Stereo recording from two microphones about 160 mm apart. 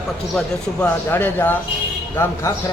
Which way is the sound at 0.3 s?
5° left (ahead or behind).